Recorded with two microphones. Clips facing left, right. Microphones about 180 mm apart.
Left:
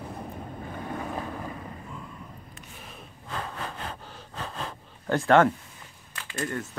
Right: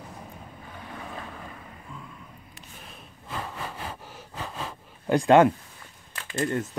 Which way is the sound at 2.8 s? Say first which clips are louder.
Left 2 dB; centre (ahead or behind).